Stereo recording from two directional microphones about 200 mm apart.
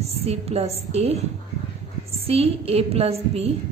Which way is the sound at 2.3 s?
30° right (ahead or behind).